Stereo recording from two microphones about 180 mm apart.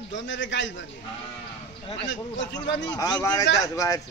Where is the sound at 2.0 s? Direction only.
85° left.